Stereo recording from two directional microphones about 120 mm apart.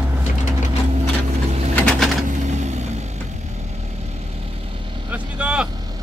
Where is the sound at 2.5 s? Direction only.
70° right (ahead or behind).